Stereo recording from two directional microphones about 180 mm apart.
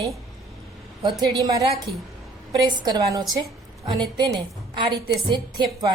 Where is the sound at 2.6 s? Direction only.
20° right (ahead or behind).